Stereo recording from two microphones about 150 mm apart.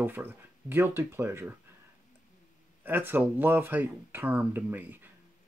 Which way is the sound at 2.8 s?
15° right (ahead or behind).